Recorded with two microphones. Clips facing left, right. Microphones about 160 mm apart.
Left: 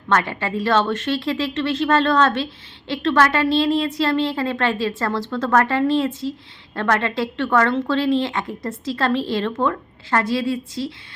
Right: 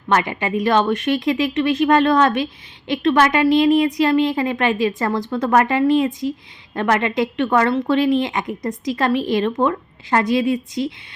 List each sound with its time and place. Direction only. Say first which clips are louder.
0.1 s speech: right 2 dB; 15° right (ahead or behind)